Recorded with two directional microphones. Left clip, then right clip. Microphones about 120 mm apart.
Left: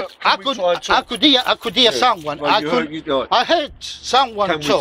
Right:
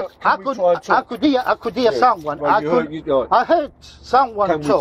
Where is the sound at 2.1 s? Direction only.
20° left (ahead or behind).